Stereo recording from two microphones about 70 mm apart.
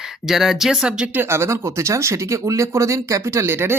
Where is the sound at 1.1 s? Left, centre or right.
Right.